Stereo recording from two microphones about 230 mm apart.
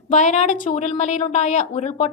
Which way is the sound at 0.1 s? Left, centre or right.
Left.